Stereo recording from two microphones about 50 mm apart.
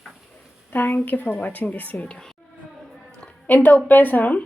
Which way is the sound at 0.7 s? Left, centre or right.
Left.